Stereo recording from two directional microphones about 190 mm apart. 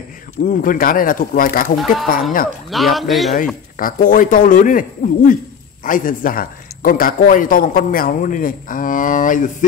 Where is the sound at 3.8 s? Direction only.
45° left (ahead or behind).